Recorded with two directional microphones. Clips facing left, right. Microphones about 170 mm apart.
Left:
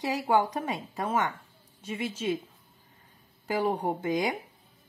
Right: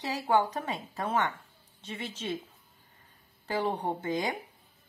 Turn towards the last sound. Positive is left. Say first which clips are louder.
# left 3 dB
turn(degrees=10)  # may be behind; listen again after turning